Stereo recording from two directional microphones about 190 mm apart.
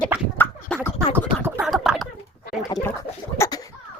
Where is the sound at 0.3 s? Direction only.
10° left (ahead or behind).